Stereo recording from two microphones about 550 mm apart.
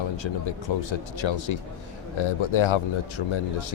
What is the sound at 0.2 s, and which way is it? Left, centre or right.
Speech, left.